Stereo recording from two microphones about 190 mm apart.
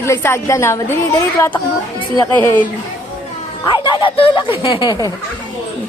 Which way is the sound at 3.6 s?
25° left (ahead or behind).